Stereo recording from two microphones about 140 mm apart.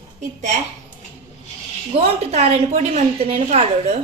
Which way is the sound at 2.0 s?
50° right (ahead or behind).